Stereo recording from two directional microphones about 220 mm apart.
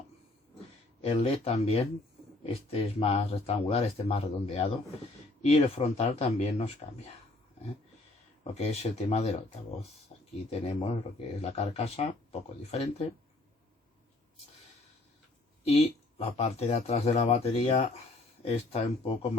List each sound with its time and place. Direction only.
1.0 s speech: 25° left (ahead or behind)
8.5 s speech: 30° left (ahead or behind)
10.1 s a sound: 30° left (ahead or behind)
10.5 s speech: 25° left (ahead or behind)
15.6 s speech: 30° left (ahead or behind)